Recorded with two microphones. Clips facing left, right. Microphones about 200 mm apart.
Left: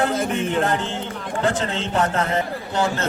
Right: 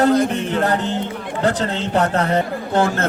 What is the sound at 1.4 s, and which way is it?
A man's voice, 35° right (ahead or behind).